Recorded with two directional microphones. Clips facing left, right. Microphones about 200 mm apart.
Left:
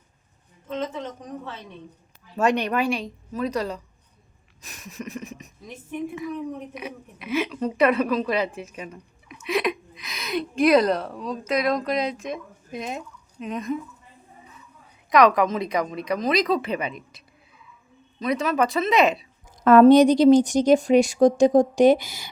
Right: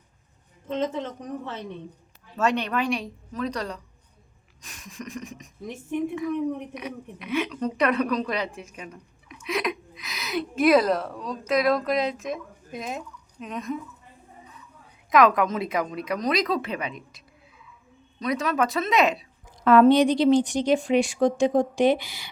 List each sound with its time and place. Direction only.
2.3 s a woman's voice: 15° left (ahead or behind)
4.6 s a sound: 5° left (ahead or behind)
6.1 s a woman's voice: 5° left (ahead or behind)
15.1 s a woman's voice: centre (ahead or behind)
19.6 s speech: 45° left (ahead or behind)